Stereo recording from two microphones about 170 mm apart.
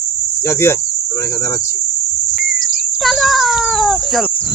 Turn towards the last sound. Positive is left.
turn(degrees=0)  # may be behind; listen again after turning